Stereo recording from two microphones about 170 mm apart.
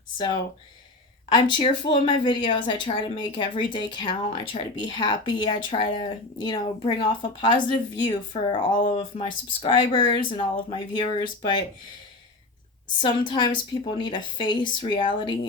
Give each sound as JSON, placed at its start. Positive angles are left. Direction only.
{"t": 1.3, "sound": "speech", "side_deg": 30}
{"t": 12.9, "sound": "speech", "side_deg": 30}